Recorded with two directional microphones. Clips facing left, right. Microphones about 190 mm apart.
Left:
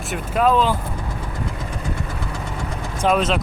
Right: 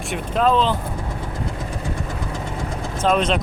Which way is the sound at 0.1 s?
5° left (ahead or behind).